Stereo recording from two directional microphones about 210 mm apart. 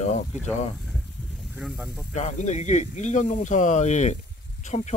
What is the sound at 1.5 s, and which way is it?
Speech, 5° right (ahead or behind).